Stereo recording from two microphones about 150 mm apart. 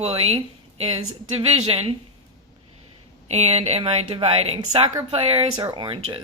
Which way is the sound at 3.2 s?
45° right (ahead or behind).